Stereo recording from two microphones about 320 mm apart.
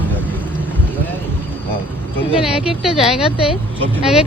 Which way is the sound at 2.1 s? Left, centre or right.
Centre.